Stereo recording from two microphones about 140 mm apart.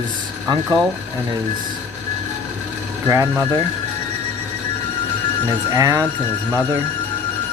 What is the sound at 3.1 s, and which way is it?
Speech, 20° right (ahead or behind).